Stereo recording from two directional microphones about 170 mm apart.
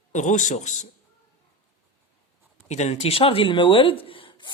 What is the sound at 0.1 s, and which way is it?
Speech, 45° left (ahead or behind).